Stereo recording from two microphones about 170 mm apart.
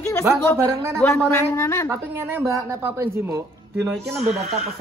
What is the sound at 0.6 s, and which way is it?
Speech, 15° right (ahead or behind).